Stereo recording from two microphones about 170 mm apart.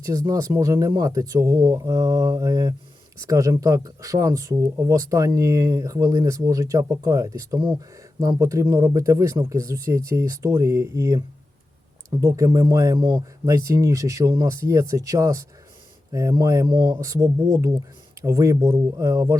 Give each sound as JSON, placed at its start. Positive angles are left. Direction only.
{"t": 0.0, "sound": "speech", "side_deg": -20}